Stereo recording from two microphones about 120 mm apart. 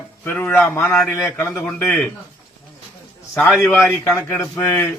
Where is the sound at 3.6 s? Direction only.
15° left (ahead or behind).